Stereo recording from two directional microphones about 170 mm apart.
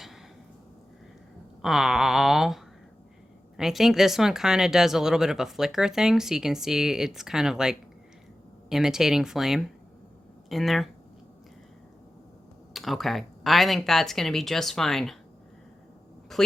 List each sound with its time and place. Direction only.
1.6 s speech: centre (ahead or behind)
3.6 s speech: centre (ahead or behind)
12.7 s speech: centre (ahead or behind)
16.3 s speech: centre (ahead or behind)